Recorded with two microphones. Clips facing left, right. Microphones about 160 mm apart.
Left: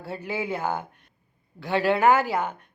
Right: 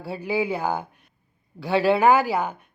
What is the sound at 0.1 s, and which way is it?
Speech, 10° right (ahead or behind).